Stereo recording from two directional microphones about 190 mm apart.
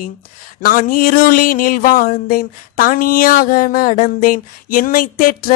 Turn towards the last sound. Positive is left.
turn(degrees=45)  # may be behind; listen again after turning